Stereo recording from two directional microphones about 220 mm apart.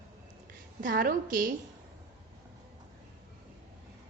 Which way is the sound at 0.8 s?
40° right (ahead or behind).